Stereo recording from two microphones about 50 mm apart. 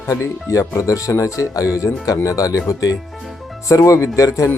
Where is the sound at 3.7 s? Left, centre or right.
Left.